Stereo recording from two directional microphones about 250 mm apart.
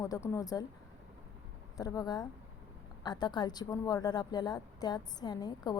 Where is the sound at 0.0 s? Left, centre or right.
Centre.